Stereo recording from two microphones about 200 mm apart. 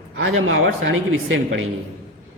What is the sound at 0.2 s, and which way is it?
A man's voice, 75° right (ahead or behind).